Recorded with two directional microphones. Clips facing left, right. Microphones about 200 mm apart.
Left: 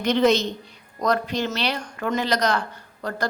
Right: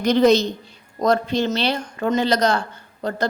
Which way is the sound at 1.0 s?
25° right (ahead or behind).